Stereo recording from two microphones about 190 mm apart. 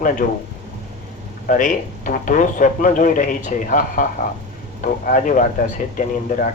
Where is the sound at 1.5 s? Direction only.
45° left (ahead or behind).